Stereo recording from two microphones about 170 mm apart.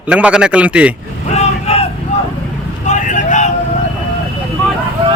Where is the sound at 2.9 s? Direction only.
45° left (ahead or behind).